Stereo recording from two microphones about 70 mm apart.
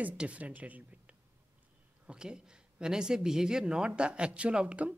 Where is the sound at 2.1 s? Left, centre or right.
Centre.